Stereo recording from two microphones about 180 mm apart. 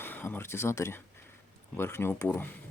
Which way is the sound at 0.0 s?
10° left (ahead or behind).